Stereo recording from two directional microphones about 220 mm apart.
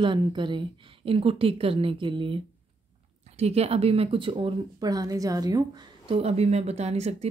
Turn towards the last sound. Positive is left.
turn(degrees=-30)  # may be behind; listen again after turning